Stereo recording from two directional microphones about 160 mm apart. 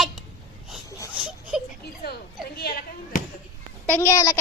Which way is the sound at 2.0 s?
80° left.